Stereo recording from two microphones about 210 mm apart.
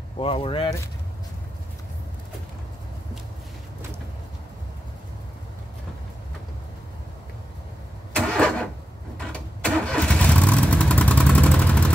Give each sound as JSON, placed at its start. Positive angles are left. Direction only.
{"t": 0.2, "sound": "speech", "side_deg": 25}
{"t": 8.1, "sound": "vehicle", "side_deg": 5}